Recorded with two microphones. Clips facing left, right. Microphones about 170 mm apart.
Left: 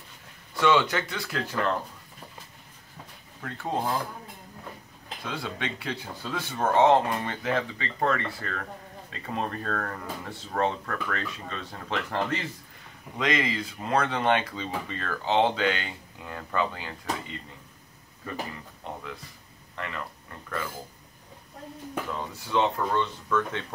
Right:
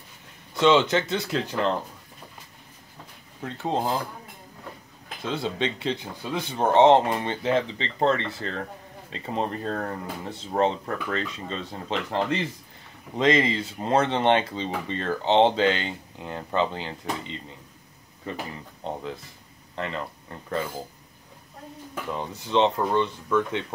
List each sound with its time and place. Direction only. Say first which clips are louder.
0.6 s speech: right 4 dB; 20° right (ahead or behind)
3.4 s speech: right 3 dB; 25° right (ahead or behind)
5.2 s speech: right 6 dB; 25° right (ahead or behind)
22.1 s speech: right 4 dB; 20° right (ahead or behind)